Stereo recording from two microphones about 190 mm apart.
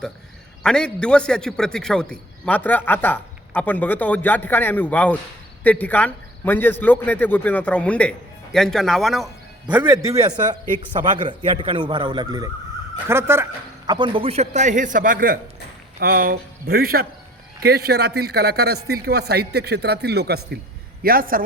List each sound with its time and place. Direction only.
0.6 s a man's voice: 5° left (ahead or behind); by 10.6 s 15° right (ahead or behind)
11.2 s a man's voice: 25° right (ahead or behind); by 21.4 s 50° right (ahead or behind)